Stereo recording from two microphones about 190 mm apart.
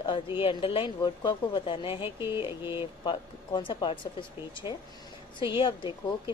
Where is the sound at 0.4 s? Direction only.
25° left (ahead or behind).